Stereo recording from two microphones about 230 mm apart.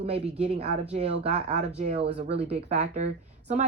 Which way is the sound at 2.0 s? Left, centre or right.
Right.